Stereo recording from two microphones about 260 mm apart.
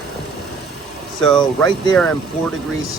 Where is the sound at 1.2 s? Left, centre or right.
Centre.